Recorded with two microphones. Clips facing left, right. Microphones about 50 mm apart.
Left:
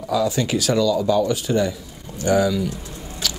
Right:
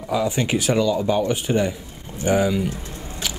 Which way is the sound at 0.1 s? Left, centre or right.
Right.